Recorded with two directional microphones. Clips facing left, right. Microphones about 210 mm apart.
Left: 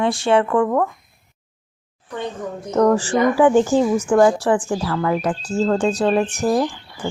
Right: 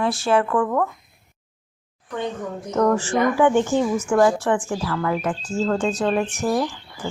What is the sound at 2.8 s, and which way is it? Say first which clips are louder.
Speech: left 3 dB; 30° left (ahead or behind).